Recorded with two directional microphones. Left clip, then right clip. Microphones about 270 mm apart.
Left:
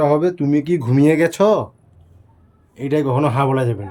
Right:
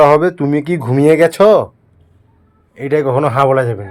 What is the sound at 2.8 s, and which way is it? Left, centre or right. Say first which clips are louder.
A man's voice: right 5 dB; centre.